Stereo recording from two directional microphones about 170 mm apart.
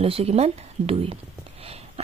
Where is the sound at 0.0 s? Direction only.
35° right (ahead or behind).